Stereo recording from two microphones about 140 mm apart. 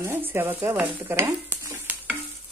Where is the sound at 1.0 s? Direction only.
20° right (ahead or behind).